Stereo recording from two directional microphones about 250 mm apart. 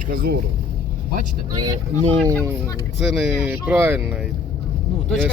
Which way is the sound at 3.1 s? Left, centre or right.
Centre.